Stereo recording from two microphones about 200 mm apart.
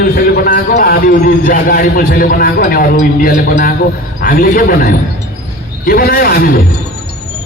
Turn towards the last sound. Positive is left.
turn(degrees=50)  # may be behind; listen again after turning